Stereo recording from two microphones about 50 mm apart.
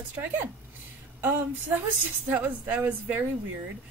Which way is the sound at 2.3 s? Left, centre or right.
Right.